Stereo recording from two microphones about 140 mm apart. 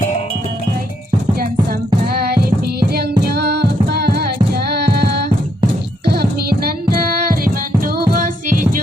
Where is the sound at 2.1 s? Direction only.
90° right.